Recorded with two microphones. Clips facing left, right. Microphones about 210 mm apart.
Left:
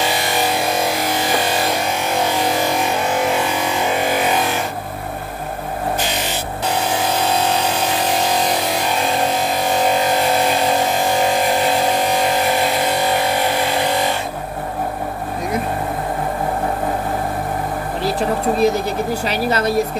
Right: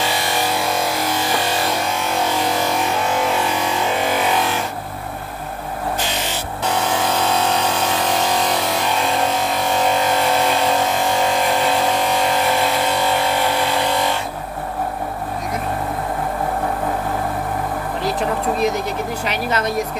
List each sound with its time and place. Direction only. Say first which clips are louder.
18.6 s speech: left 3 dB; 30° left (ahead or behind)